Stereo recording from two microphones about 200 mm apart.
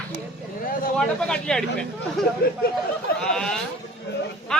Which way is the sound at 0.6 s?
45° left (ahead or behind).